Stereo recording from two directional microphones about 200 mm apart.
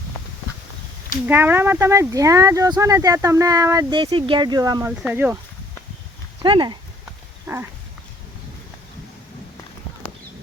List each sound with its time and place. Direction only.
1.3 s speech: 10° right (ahead or behind)
6.4 s speech: 25° right (ahead or behind)
7.4 s dog: 10° right (ahead or behind)